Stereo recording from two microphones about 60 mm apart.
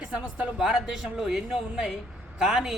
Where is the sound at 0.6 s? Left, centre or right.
Centre.